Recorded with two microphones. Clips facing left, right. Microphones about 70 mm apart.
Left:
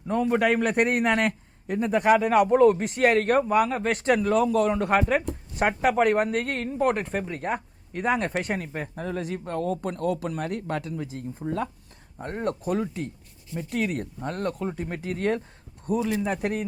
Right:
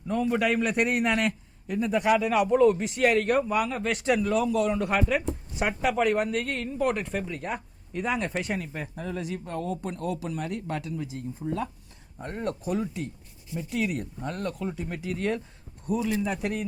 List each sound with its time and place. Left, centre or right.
0.1 s speech: left